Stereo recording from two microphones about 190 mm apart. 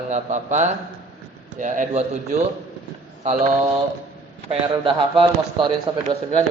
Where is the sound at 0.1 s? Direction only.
40° right (ahead or behind).